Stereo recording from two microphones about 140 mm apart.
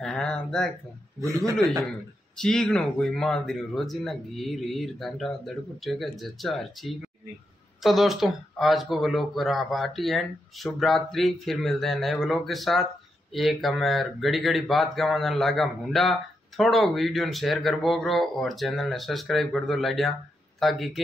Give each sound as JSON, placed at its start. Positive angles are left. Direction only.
{"t": 0.0, "sound": "a sound", "side_deg": 5}
{"t": 1.2, "sound": "a man's voice", "side_deg": -25}
{"t": 1.9, "sound": "speech", "side_deg": 5}